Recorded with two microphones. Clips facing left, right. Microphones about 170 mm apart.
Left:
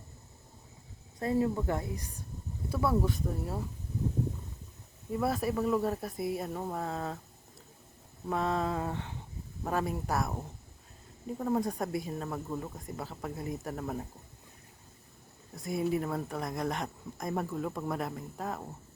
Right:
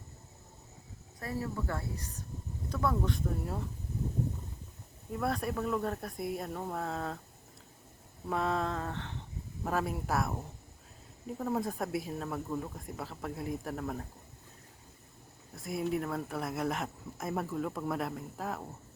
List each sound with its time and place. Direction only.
1.2 s speech: 20° left (ahead or behind); by 3.6 s centre (ahead or behind)
5.1 s speech: 5° left (ahead or behind)
8.3 s speech: centre (ahead or behind)
9.6 s speech: centre (ahead or behind)
11.3 s speech: centre (ahead or behind)
15.5 s speech: centre (ahead or behind)